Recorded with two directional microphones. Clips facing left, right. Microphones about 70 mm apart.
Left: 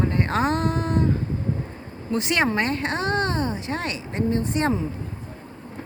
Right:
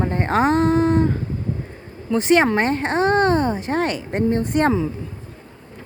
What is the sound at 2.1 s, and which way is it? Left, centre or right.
Speech, right.